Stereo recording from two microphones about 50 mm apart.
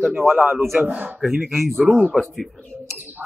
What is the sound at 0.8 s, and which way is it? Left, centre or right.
Speech, right.